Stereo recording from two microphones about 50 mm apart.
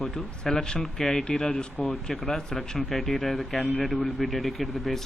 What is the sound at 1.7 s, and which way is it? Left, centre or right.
Speech, centre.